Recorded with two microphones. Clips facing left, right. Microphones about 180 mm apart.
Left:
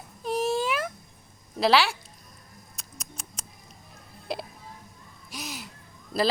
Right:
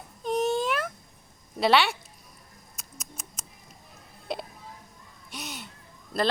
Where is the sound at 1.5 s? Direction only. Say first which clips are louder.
Even; centre (ahead or behind).